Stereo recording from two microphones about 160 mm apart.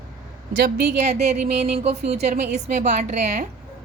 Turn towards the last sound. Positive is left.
turn(degrees=-45)  # may be behind; listen again after turning